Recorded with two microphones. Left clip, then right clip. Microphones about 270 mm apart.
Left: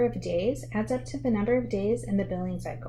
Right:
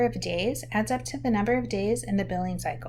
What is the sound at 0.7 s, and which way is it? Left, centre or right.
Speech, right.